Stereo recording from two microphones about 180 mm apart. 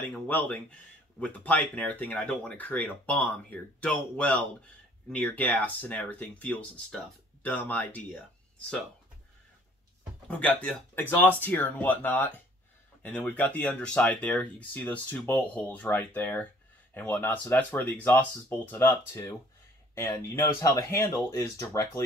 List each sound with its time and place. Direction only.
0.0 s speech: 10° left (ahead or behind)
10.2 s speech: 10° left (ahead or behind)